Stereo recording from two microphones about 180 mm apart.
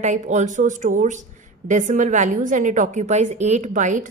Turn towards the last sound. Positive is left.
turn(degrees=-45)  # may be behind; listen again after turning